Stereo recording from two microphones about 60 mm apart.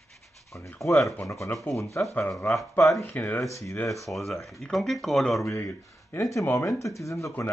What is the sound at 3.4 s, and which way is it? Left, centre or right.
Speech, left.